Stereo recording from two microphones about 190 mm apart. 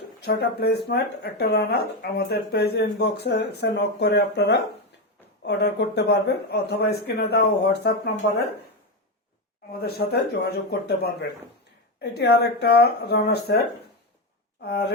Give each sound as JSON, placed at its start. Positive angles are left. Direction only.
{"t": 0.3, "sound": "speech", "side_deg": 60}
{"t": 9.8, "sound": "speech", "side_deg": 60}
{"t": 14.6, "sound": "speech", "side_deg": 60}